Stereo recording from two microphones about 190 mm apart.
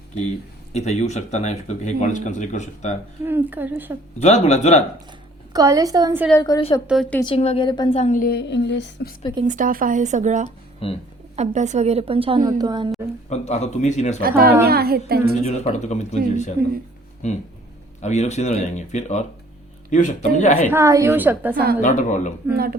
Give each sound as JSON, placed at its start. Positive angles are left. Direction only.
{"t": 0.7, "sound": "speech", "side_deg": 35}
{"t": 3.2, "sound": "a woman's voice", "side_deg": -10}
{"t": 4.2, "sound": "speech", "side_deg": 35}
{"t": 5.5, "sound": "a woman's voice", "side_deg": -20}
{"t": 6.4, "sound": "a woman's voice", "side_deg": 25}
{"t": 6.8, "sound": "a woman's voice", "side_deg": 0}
{"t": 7.3, "sound": "speech", "side_deg": 30}
{"t": 9.4, "sound": "a woman's voice", "side_deg": -40}
{"t": 13.3, "sound": "speech", "side_deg": 35}
{"t": 14.2, "sound": "speech", "side_deg": -50}
{"t": 15.4, "sound": "speech", "side_deg": 35}
{"t": 20.7, "sound": "a woman's voice", "side_deg": -15}
{"t": 21.5, "sound": "speech", "side_deg": -50}
{"t": 21.8, "sound": "speech", "side_deg": 40}